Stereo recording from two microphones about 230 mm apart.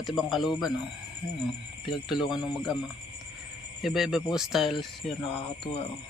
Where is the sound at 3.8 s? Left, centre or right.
Centre.